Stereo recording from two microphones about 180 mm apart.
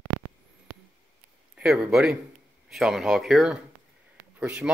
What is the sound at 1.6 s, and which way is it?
Speech, 5° right (ahead or behind).